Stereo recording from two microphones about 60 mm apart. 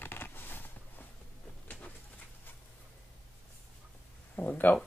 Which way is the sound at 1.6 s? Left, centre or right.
Left.